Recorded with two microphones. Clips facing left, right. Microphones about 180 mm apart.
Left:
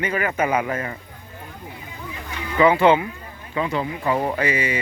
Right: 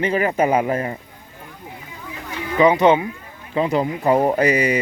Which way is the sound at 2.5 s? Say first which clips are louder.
Right 1 dB; 20° right (ahead or behind).